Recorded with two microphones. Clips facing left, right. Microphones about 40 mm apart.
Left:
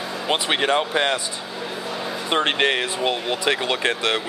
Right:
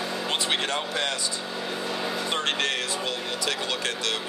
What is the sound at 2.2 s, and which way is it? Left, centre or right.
Speech, left.